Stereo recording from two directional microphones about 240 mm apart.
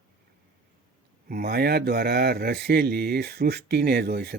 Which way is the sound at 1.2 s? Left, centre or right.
Right.